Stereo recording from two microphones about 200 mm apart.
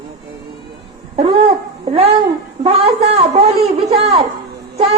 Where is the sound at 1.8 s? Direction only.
30° right (ahead or behind).